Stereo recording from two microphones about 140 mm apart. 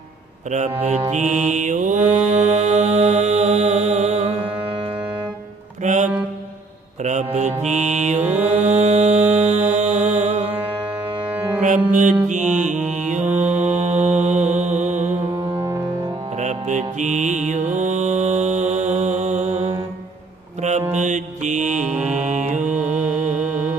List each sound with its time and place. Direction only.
0.5 s speech: 55° right (ahead or behind)
1.1 s mantra: 60° right (ahead or behind)
2.5 s music: 50° right (ahead or behind)
5.8 s music: 60° right (ahead or behind)
7.6 s mantra: 55° right (ahead or behind)
8.2 s music: 10° right (ahead or behind)
8.4 s mantra: 50° right (ahead or behind)
12.3 s mantra: 60° right (ahead or behind)
15.5 s music: 20° right (ahead or behind)
16.4 s mantra: 60° right (ahead or behind)
22.0 s music: 55° right (ahead or behind)
22.7 s mantra: 10° right (ahead or behind)